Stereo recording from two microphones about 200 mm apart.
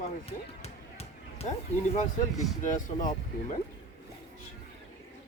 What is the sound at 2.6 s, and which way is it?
Speech, 40° left (ahead or behind).